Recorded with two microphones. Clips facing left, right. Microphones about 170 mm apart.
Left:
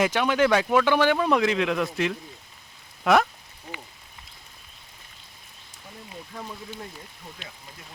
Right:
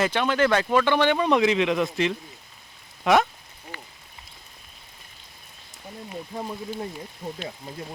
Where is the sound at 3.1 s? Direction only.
Centre (ahead or behind).